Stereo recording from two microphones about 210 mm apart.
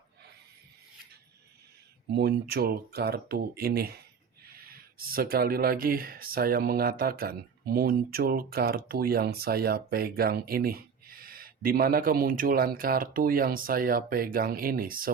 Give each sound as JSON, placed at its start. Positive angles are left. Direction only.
{"t": 2.1, "sound": "speech", "side_deg": -50}